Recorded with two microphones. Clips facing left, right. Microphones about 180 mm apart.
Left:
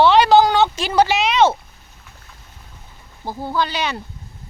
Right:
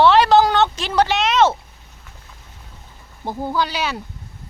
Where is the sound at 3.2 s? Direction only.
10° right (ahead or behind).